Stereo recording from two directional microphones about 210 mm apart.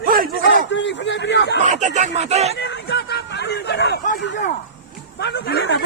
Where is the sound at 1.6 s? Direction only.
35° right (ahead or behind).